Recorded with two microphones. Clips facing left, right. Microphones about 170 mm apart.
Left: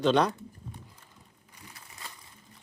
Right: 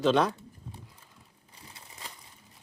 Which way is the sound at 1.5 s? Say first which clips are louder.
Even; 25° right (ahead or behind).